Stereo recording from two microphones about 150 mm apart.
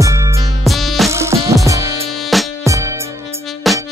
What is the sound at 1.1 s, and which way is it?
Music, 20° right (ahead or behind).